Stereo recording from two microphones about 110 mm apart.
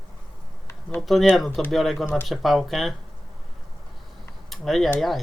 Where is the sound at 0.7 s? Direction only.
20° left (ahead or behind).